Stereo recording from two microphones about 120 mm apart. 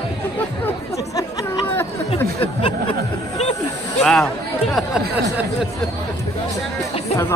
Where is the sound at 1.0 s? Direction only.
30° left (ahead or behind).